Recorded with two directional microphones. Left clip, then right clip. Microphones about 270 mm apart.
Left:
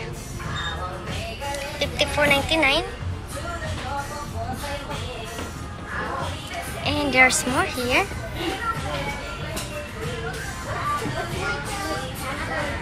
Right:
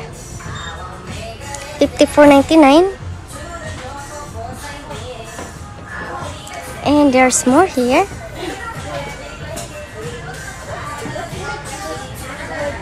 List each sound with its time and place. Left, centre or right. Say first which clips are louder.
1.8 s speech: right 12 dB; centre
6.8 s speech: right 6 dB; centre